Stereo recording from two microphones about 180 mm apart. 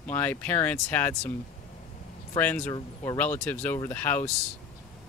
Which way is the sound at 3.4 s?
10° left (ahead or behind).